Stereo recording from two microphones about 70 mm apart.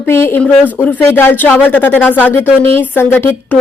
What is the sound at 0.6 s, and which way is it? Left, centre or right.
Speech, left.